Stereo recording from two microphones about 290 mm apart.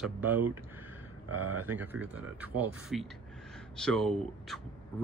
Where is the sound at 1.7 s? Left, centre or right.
Centre.